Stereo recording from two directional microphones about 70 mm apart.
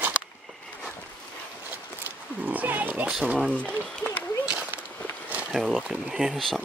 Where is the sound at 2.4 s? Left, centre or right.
Right.